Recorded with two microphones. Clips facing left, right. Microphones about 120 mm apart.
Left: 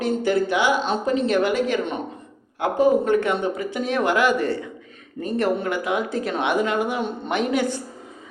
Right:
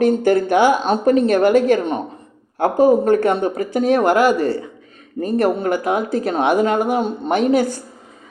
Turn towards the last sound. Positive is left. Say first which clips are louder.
# right 6 dB
turn(degrees=-40)  # may be behind; listen again after turning